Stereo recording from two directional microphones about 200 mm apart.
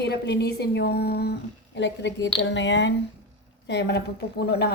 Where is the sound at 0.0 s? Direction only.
55° left (ahead or behind).